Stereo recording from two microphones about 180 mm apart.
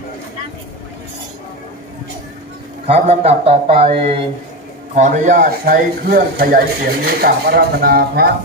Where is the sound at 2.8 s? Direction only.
35° right (ahead or behind).